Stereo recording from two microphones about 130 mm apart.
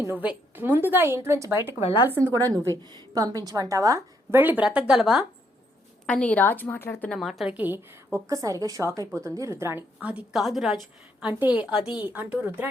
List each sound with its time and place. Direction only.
0.1 s a woman's voice: 15° right (ahead or behind)
2.3 s a woman's voice: 30° right (ahead or behind); by 5.2 s 5° right (ahead or behind)
6.1 s a woman's voice: 10° left (ahead or behind)
7.1 s a woman's voice: centre (ahead or behind); by 9.8 s 20° right (ahead or behind)
10.0 s a woman's voice: 10° right (ahead or behind)